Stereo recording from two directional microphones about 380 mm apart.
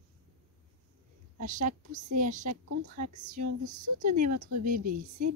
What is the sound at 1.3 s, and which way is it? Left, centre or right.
A woman's voice, centre.